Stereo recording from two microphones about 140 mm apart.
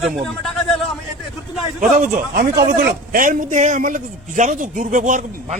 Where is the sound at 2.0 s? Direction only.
70° right (ahead or behind).